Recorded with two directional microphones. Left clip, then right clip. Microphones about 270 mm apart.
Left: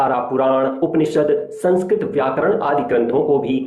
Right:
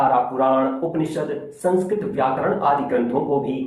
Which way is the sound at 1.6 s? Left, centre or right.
Left.